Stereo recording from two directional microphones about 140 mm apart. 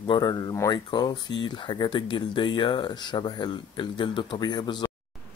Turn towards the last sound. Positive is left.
turn(degrees=30)  # may be behind; listen again after turning